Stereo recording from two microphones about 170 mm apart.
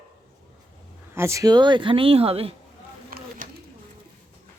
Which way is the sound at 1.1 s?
15° right (ahead or behind).